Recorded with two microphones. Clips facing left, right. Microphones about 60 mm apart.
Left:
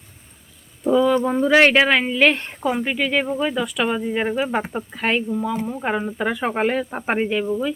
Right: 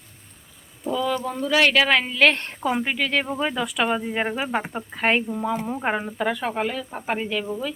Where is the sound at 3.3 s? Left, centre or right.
Centre.